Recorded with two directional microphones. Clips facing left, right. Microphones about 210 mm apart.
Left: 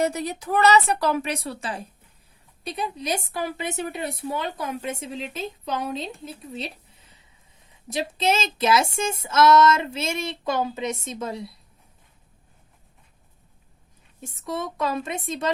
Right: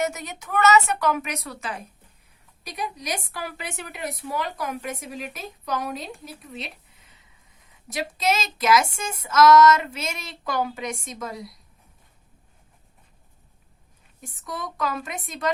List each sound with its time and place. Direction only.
0.0 s a woman's voice: 35° left (ahead or behind)
7.9 s speech: 30° left (ahead or behind)
14.2 s speech: 25° left (ahead or behind)